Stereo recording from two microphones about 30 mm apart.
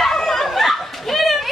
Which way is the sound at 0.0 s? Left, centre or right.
Centre.